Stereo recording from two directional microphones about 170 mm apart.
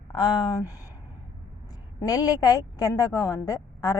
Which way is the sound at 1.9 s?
20° left (ahead or behind).